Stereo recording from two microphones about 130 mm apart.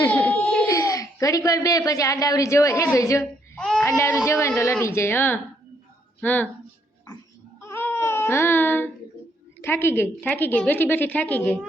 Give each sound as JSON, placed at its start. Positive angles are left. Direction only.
{"t": 0.0, "sound": "crying", "side_deg": 15}
{"t": 0.7, "sound": "a woman's voice", "side_deg": 25}
{"t": 3.6, "sound": "baby cry", "side_deg": 5}
{"t": 3.8, "sound": "a woman's voice", "side_deg": 25}
{"t": 7.6, "sound": "baby cry", "side_deg": 15}
{"t": 9.6, "sound": "a woman's voice", "side_deg": 15}